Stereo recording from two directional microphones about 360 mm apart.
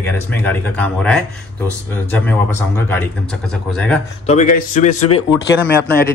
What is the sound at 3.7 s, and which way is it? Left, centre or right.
Speech, centre.